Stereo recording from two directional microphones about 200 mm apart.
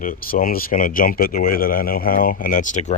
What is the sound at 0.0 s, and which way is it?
Speech, 45° left (ahead or behind).